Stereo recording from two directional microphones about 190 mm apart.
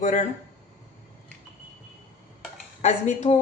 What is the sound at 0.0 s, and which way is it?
Speech, 35° left (ahead or behind).